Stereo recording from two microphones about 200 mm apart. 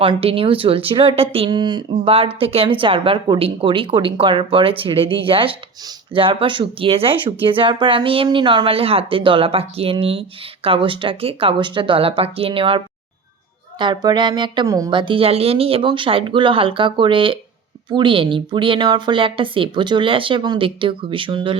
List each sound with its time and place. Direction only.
0.0 s speech: 25° right (ahead or behind)